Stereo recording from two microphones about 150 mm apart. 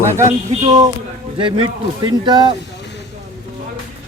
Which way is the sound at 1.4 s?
30° right (ahead or behind).